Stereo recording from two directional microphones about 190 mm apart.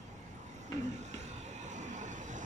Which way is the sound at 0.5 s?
40° right (ahead or behind).